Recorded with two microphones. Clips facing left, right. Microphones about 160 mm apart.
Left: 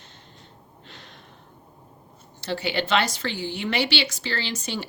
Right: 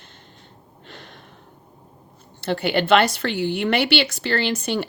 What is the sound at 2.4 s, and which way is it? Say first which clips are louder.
Speech: right 5 dB; 55° right (ahead or behind).